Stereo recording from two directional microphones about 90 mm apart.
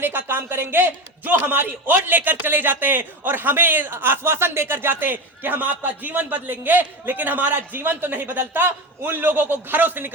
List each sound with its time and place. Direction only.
0.0 s a man's voice: 25° right (ahead or behind)